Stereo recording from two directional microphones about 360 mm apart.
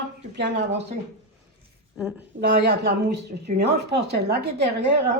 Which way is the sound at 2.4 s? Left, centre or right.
Right.